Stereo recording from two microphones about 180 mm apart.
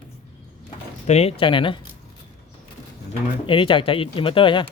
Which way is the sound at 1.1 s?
35° left (ahead or behind).